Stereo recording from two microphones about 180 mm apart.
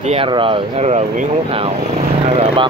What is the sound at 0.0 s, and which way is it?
Speech, 30° right (ahead or behind).